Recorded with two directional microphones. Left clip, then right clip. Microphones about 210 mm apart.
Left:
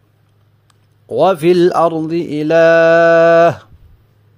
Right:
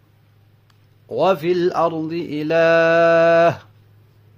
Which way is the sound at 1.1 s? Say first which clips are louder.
Left 6 dB; 30° left (ahead or behind).